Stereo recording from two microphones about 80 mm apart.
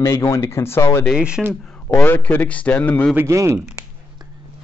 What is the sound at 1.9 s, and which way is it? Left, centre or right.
Speech, left.